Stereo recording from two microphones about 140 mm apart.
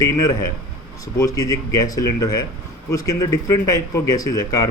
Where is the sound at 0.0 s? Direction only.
25° left (ahead or behind).